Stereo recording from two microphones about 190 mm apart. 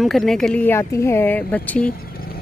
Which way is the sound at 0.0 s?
Centre (ahead or behind).